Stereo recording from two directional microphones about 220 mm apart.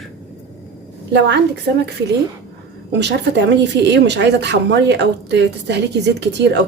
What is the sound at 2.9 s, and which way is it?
Speech, 50° right (ahead or behind).